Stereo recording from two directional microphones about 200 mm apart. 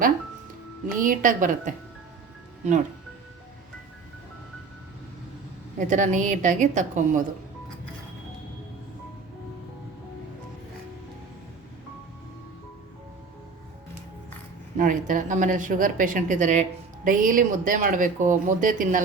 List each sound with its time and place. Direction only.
0.9 s speech: 40° right (ahead or behind)
5.8 s speech: 40° right (ahead or behind)
14.8 s speech: 40° right (ahead or behind)